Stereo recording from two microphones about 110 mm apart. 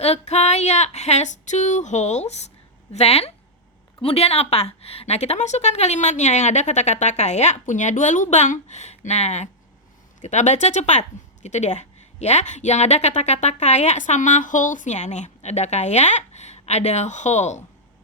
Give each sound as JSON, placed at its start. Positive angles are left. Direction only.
{"t": 0.0, "sound": "a woman's voice", "side_deg": 85}
{"t": 2.9, "sound": "a woman's voice", "side_deg": 70}